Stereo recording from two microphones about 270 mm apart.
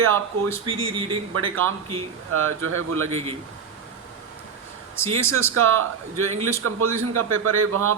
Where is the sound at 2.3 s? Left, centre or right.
Right.